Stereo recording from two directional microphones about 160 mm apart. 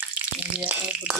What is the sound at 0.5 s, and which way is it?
Speech, 10° right (ahead or behind).